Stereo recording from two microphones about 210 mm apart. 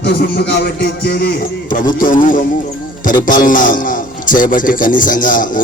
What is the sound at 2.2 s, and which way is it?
A man's voice, 40° left (ahead or behind).